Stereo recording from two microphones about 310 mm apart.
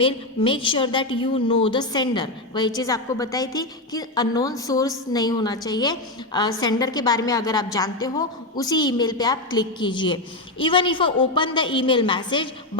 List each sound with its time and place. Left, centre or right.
0.0 s a woman's voice: centre